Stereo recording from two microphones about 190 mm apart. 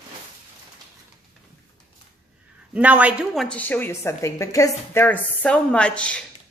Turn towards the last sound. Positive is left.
turn(degrees=5)  # may be behind; listen again after turning